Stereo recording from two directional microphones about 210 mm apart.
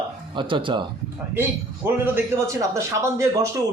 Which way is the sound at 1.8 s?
10° right (ahead or behind).